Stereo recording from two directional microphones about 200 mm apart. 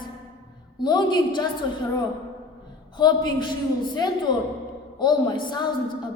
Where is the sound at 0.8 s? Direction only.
20° left (ahead or behind).